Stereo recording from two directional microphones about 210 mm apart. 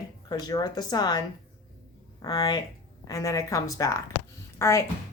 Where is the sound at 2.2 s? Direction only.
20° left (ahead or behind).